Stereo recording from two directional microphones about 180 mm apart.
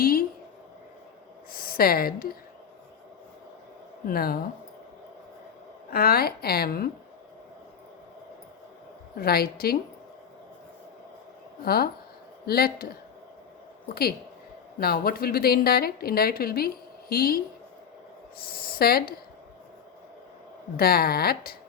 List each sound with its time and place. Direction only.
0.0 s a sound: 55° left (ahead or behind)
1.5 s speech: 55° left (ahead or behind)
4.0 s a woman's voice: 55° left (ahead or behind)
5.9 s a woman's voice: 55° left (ahead or behind)
9.1 s a woman's voice: 60° left (ahead or behind)
11.6 s a woman's voice: 60° left (ahead or behind)
18.4 s a woman's voice: 55° left (ahead or behind)
20.7 s a woman's voice: 55° left (ahead or behind)